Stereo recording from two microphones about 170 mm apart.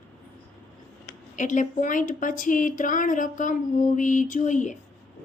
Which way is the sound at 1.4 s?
45° left (ahead or behind).